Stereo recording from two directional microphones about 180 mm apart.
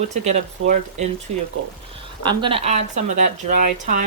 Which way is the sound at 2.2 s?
30° right (ahead or behind).